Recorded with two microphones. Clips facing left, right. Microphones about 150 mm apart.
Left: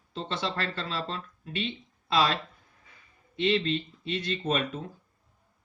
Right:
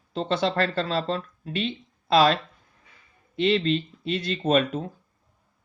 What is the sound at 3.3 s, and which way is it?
Speech, 30° right (ahead or behind).